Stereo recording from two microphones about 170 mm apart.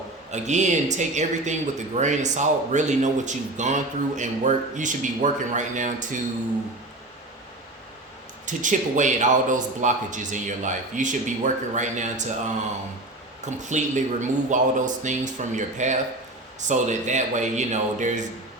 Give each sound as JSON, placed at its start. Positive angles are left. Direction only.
{"t": 0.3, "sound": "speech", "side_deg": -45}
{"t": 8.4, "sound": "speech", "side_deg": -45}
{"t": 13.4, "sound": "speech", "side_deg": -45}